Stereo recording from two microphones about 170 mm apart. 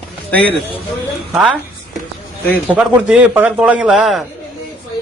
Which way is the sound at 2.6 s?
5° right (ahead or behind).